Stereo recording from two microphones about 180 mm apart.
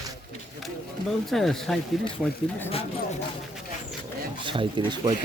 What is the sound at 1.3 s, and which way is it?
Speech, centre (ahead or behind).